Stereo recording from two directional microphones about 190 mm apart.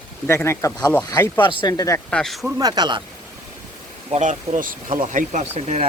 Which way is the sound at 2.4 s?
20° right (ahead or behind).